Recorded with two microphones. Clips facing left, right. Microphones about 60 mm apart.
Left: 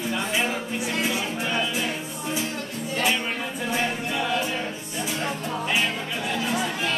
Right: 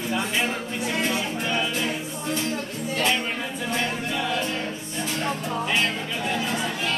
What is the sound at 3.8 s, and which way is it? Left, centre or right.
A capella, centre.